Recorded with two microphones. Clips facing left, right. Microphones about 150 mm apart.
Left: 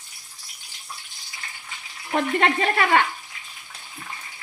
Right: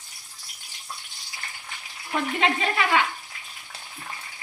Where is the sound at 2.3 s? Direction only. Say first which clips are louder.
Left 3 dB; 50° left (ahead or behind).